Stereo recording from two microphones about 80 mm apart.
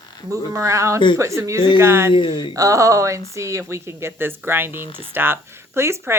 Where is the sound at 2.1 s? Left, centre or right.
Left.